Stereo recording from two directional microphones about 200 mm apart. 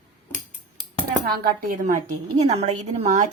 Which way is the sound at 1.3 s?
45° right (ahead or behind).